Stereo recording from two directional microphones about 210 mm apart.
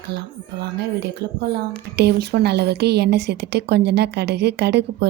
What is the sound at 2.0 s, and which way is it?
A woman's voice, 50° right (ahead or behind).